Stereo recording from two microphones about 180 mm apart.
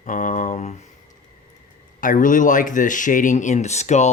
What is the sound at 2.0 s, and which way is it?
Speech, 50° left (ahead or behind).